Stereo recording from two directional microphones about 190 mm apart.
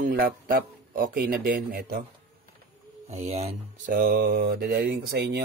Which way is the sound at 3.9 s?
55° right (ahead or behind).